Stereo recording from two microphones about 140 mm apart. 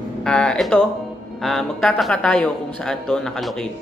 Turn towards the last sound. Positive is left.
turn(degrees=5)  # may be behind; listen again after turning